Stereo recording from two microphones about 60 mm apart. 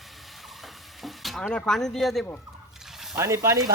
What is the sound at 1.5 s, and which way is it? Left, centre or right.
Speech, centre.